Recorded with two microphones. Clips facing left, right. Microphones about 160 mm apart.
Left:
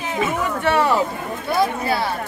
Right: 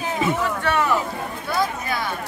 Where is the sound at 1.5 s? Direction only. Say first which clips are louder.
Left 5 dB; 30° left (ahead or behind).